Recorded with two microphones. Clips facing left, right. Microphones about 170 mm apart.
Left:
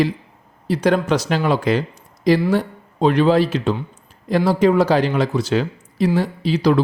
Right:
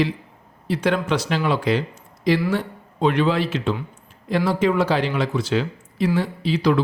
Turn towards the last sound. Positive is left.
turn(degrees=40)  # may be behind; listen again after turning